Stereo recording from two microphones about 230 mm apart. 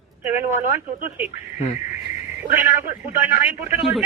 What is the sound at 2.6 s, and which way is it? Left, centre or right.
Speech, centre.